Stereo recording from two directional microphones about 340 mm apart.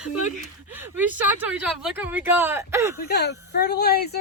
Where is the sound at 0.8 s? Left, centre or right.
Centre.